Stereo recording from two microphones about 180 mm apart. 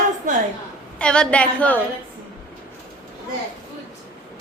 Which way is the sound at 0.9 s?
5° left (ahead or behind).